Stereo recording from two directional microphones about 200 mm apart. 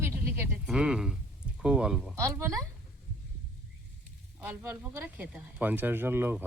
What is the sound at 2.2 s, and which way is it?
Speech, 15° right (ahead or behind).